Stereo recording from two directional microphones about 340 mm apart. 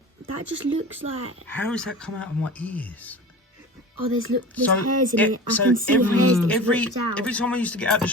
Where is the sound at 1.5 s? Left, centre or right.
Centre.